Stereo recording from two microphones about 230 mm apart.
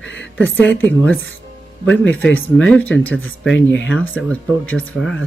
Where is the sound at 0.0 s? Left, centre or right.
Left.